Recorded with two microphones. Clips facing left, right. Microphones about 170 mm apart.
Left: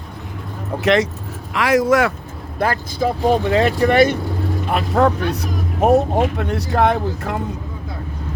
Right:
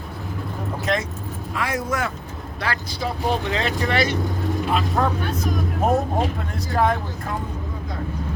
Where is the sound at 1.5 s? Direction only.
90° left.